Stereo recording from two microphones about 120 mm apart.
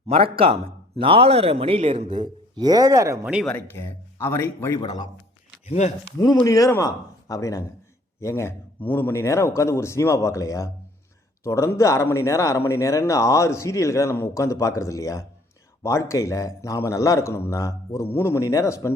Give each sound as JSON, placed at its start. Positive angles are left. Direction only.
{"t": 0.1, "sound": "speech", "side_deg": -50}
{"t": 2.6, "sound": "speech", "side_deg": -35}
{"t": 3.8, "sound": "a man's voice", "side_deg": 20}
{"t": 4.8, "sound": "speech", "side_deg": 35}
{"t": 5.6, "sound": "speech", "side_deg": 70}
{"t": 6.4, "sound": "a man's voice", "side_deg": 30}